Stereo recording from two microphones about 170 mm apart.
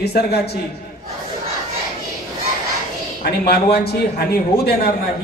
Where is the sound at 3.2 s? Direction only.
70° left (ahead or behind).